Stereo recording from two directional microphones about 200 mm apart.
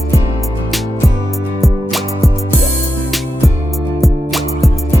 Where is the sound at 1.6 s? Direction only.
Centre (ahead or behind).